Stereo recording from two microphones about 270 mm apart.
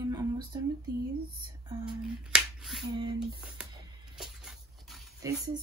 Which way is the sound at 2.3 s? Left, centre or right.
Centre.